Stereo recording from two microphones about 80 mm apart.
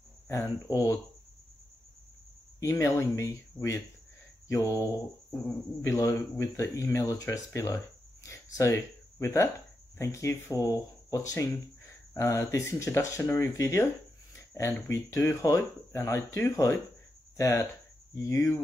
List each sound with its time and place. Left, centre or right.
0.7 s speech: left
2.6 s speech: left
4.5 s speech: left